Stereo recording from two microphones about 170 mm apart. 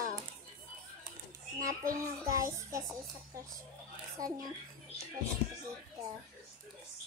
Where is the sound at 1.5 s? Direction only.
55° right (ahead or behind).